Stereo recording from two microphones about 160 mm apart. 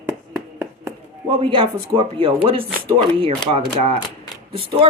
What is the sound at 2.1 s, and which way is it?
Speech, 35° right (ahead or behind).